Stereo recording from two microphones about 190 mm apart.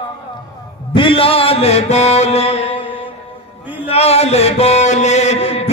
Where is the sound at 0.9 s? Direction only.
25° left (ahead or behind).